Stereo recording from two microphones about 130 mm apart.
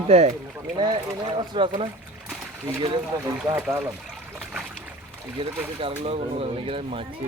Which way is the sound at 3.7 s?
20° right (ahead or behind).